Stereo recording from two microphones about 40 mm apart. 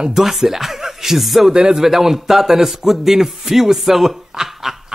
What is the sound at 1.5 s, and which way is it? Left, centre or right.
Speech, centre.